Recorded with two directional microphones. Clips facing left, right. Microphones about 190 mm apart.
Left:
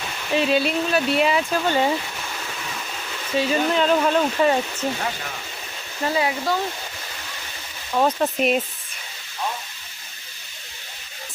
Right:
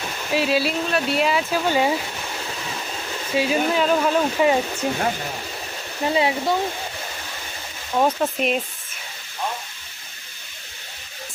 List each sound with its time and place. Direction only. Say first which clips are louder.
0.3 s speech: left 1 dB; 5° right (ahead or behind)
3.3 s speech: even; 10° right (ahead or behind)
6.0 s speech: right 2 dB; 20° right (ahead or behind)
7.9 s speech: even; 5° right (ahead or behind)